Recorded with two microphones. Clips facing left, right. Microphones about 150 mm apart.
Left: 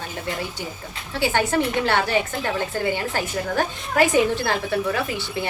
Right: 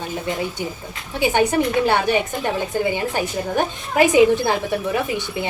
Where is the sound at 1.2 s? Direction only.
15° right (ahead or behind).